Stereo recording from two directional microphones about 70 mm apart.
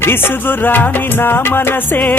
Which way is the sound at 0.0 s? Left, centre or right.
Left.